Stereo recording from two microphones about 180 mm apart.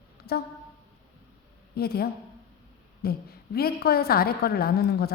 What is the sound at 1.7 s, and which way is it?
A woman's voice, 60° left (ahead or behind).